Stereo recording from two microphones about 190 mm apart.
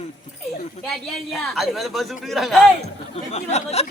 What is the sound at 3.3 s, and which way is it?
Speech, 35° left (ahead or behind).